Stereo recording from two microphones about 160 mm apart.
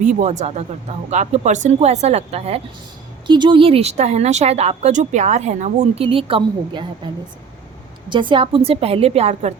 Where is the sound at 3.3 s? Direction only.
30° right (ahead or behind).